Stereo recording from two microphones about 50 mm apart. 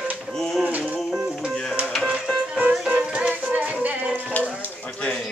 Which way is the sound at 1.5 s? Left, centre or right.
Centre.